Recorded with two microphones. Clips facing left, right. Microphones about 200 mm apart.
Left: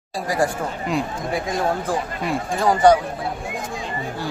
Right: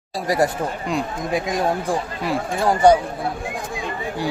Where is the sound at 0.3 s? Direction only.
20° right (ahead or behind).